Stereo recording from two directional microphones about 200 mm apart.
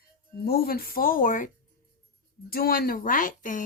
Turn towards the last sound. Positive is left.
turn(degrees=40)  # may be behind; listen again after turning